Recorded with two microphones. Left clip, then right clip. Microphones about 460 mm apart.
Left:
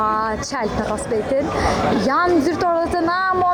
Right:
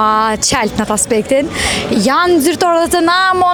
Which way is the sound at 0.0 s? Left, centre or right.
Right.